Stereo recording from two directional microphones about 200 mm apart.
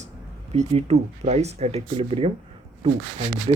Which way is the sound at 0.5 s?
30° right (ahead or behind).